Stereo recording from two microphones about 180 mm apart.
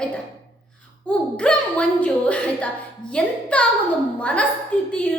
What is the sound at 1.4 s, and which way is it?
A woman's voice, 5° left (ahead or behind).